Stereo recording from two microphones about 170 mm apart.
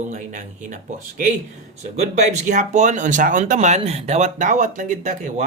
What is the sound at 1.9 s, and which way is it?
Speech, 45° right (ahead or behind).